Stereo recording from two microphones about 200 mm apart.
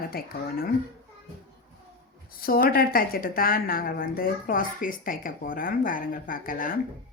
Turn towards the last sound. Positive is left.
turn(degrees=45)  # may be behind; listen again after turning